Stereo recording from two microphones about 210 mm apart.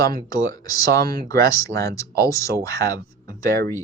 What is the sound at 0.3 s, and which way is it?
Speech, 15° left (ahead or behind).